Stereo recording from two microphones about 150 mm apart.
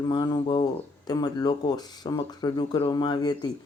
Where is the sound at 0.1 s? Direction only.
30° left (ahead or behind).